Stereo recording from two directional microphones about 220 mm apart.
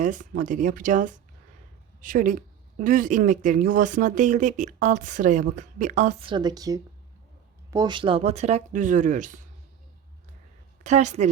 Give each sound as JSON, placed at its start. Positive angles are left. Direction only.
{"t": 0.0, "sound": "speech", "side_deg": -35}
{"t": 10.8, "sound": "speech", "side_deg": -30}